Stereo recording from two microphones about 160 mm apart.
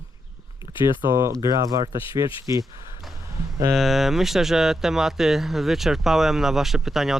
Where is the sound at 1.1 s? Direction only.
20° right (ahead or behind).